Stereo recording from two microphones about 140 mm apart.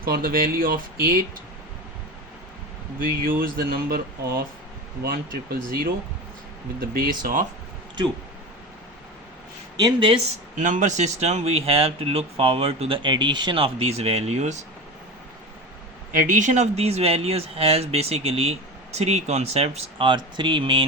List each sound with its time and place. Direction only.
0.0 s speech: 90° right
3.2 s speech: 90° right
5.0 s speech: 90° right
9.7 s speech: 35° right (ahead or behind)
10.6 s speech: 60° right (ahead or behind)
16.1 s speech: 60° right (ahead or behind); by 20.8 s 35° right (ahead or behind)